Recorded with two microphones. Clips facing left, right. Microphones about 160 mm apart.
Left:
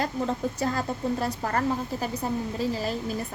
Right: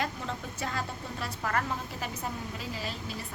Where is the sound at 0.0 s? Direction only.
40° left (ahead or behind).